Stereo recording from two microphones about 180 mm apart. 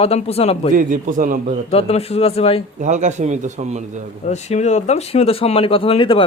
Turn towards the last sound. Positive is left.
turn(degrees=30)  # may be behind; listen again after turning